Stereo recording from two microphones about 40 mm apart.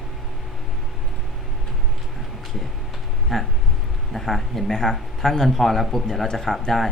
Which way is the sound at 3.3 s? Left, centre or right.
Centre.